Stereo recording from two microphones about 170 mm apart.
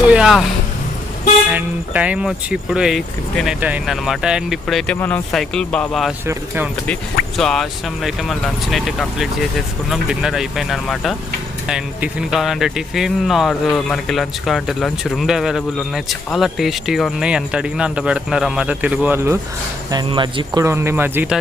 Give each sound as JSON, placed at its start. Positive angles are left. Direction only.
{"t": 0.1, "sound": "vehicle", "side_deg": -5}
{"t": 1.5, "sound": "speech", "side_deg": -10}
{"t": 4.9, "sound": "speech", "side_deg": 10}
{"t": 7.3, "sound": "speech", "side_deg": 0}
{"t": 19.9, "sound": "speech", "side_deg": -25}